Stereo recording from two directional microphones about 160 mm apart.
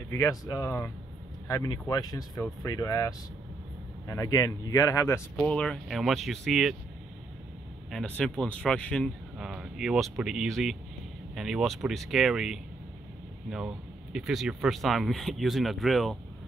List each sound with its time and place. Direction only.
0.1 s speech: 20° left (ahead or behind)
5.3 s speech: 5° left (ahead or behind)
8.2 s speech: 5° left (ahead or behind)